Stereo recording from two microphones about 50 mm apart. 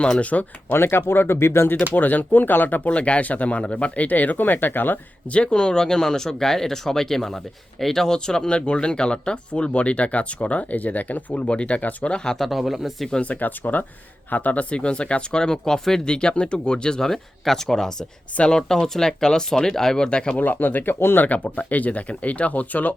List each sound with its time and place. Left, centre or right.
0.0 s speech: left
0.7 s speech: left
1.9 s speech: left
2.9 s speech: left
5.3 s speech: left
12.1 s speech: centre
12.5 s speech: centre
13.2 s speech: left
20.4 s speech: left
21.2 s speech: left